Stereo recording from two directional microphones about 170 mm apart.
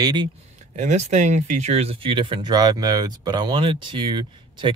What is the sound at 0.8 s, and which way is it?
Speech, 45° right (ahead or behind).